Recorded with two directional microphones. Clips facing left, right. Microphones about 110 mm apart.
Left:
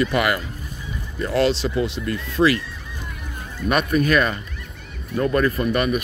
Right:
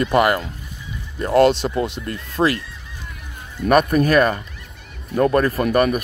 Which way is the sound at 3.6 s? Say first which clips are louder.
Right 4 dB; 45° right (ahead or behind).